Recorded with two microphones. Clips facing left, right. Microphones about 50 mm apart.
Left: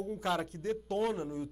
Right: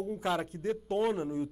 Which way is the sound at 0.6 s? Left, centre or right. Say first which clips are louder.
Right 2 dB; right.